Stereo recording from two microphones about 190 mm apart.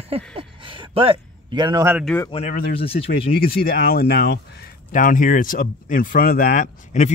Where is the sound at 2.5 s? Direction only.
50° left (ahead or behind).